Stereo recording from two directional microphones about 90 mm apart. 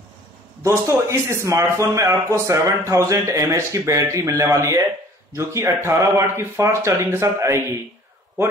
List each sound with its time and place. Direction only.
0.7 s speech: 30° right (ahead or behind)